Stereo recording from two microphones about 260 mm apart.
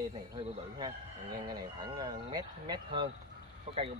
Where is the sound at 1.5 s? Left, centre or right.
Centre.